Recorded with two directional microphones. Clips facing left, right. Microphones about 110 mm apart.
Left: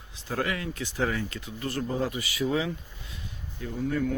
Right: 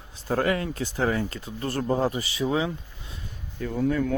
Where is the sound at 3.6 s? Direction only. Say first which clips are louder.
Right 6 dB; 70° right (ahead or behind).